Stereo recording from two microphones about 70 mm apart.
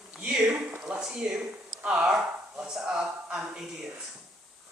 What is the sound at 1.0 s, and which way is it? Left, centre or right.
A man's voice, centre.